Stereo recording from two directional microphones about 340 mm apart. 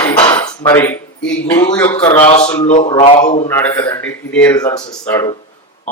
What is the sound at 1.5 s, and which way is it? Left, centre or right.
Speech, centre.